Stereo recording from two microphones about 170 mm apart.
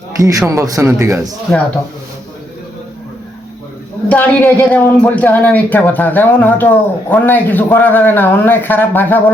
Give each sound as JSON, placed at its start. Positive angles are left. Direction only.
{"t": 0.2, "sound": "a man's voice", "side_deg": -20}
{"t": 1.2, "sound": "speech", "side_deg": 0}
{"t": 4.1, "sound": "speech", "side_deg": 10}